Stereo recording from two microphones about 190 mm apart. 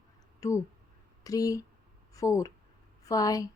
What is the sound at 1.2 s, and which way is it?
A woman's voice, 20° left (ahead or behind).